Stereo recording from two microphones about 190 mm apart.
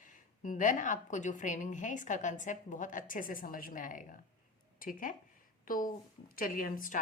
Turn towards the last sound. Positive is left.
turn(degrees=45)  # may be behind; listen again after turning